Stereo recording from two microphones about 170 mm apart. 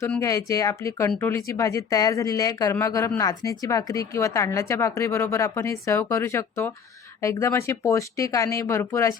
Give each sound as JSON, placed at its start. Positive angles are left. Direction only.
{"t": 0.2, "sound": "speech", "side_deg": 20}